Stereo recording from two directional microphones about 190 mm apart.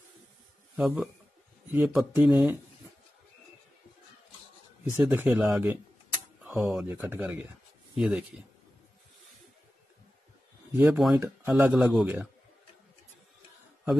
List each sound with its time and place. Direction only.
0.7 s speech: centre (ahead or behind)
4.8 s speech: 15° right (ahead or behind)
10.8 s speech: centre (ahead or behind)